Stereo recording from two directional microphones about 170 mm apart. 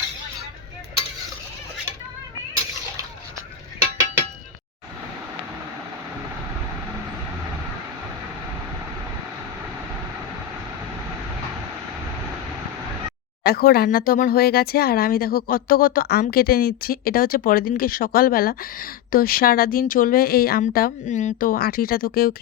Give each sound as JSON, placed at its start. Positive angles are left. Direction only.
{"t": 13.4, "sound": "speech", "side_deg": 65}
{"t": 21.1, "sound": "speech", "side_deg": 45}